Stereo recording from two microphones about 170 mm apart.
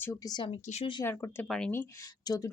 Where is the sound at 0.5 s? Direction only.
40° left (ahead or behind).